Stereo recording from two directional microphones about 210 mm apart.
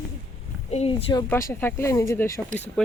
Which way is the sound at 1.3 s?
10° left (ahead or behind).